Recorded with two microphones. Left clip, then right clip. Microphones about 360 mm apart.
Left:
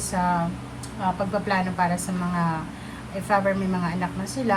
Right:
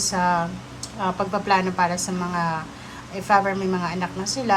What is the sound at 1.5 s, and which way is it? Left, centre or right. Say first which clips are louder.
A woman's voice: right 5 dB; centre.